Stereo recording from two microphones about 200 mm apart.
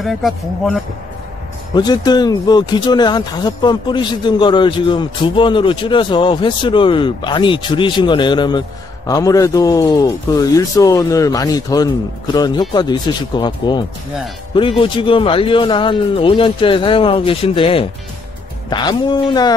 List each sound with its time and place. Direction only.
0.0 s speech: centre (ahead or behind)
1.8 s speech: 20° left (ahead or behind)